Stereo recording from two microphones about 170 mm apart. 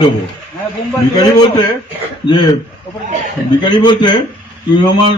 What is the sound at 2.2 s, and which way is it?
Speech, 25° left (ahead or behind).